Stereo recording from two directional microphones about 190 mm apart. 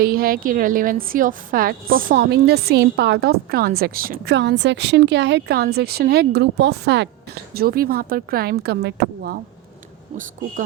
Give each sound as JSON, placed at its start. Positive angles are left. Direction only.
{"t": 0.0, "sound": "a woman's voice", "side_deg": -50}
{"t": 7.5, "sound": "speech", "side_deg": -55}